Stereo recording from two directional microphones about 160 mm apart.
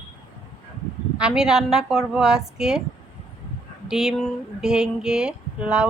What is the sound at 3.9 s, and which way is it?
Speech, centre (ahead or behind).